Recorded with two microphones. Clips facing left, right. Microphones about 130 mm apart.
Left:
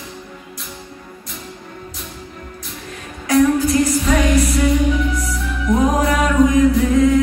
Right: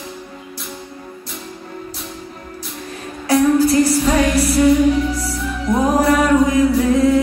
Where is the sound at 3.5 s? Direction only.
30° right (ahead or behind).